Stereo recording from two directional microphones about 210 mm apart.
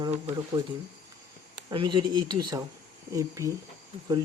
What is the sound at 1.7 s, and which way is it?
Speech, 25° right (ahead or behind).